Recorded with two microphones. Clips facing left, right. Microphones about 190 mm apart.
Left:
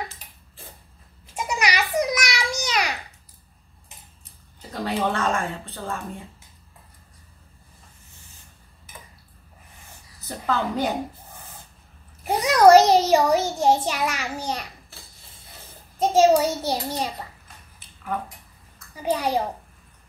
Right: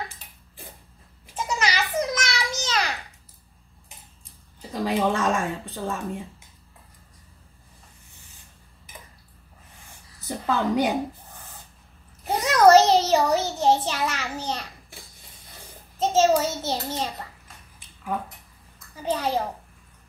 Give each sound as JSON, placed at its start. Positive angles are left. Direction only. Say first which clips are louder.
{"t": 1.3, "sound": "a sound", "louder": "left 1 dB", "side_deg": 15}
{"t": 4.6, "sound": "speech", "louder": "right 2 dB", "side_deg": -15}
{"t": 10.2, "sound": "a woman's voice", "louder": "right 1 dB", "side_deg": -15}
{"t": 12.3, "sound": "a child's voice", "louder": "left 2 dB", "side_deg": 10}
{"t": 16.0, "sound": "a child's voice", "louder": "left 3 dB", "side_deg": 10}
{"t": 19.0, "sound": "a child's voice", "louder": "left 2 dB", "side_deg": 15}